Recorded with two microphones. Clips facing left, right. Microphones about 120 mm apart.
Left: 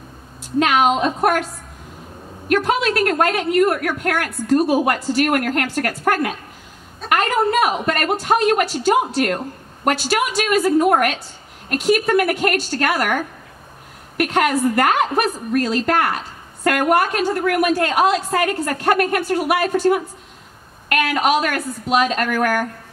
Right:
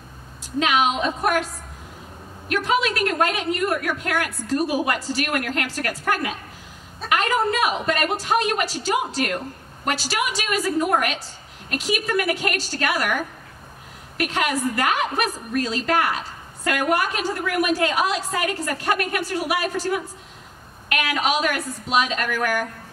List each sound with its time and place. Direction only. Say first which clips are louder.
0.6 s a woman's voice: left 5 dB; 50° left (ahead or behind)
2.4 s a woman's voice: left 4 dB; 55° left (ahead or behind)